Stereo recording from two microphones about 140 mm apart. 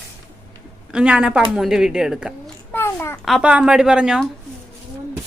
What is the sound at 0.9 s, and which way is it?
A woman's voice, 5° right (ahead or behind).